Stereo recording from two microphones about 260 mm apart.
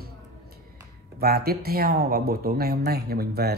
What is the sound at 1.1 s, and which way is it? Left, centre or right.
Speech, right.